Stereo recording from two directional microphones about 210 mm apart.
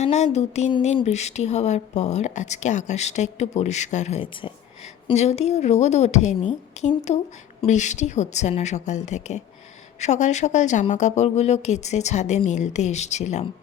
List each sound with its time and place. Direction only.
0.0 s speech: 30° left (ahead or behind)